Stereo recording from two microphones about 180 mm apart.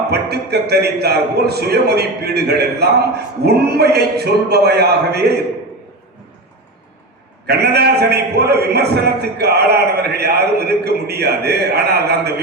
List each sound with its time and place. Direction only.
0.1 s a man's voice: 65° right (ahead or behind)
7.4 s a man's voice: 65° right (ahead or behind)